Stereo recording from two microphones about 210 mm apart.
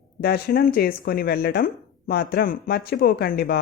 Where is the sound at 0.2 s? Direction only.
45° left (ahead or behind).